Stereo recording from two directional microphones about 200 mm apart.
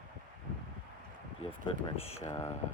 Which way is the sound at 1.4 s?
30° left (ahead or behind).